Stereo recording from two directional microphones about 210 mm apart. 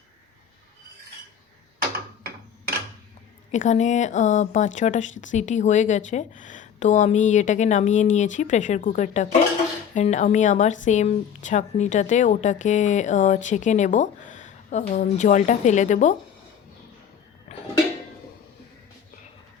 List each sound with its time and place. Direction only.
3.5 s speech: 35° left (ahead or behind)
17.5 s music: 35° left (ahead or behind)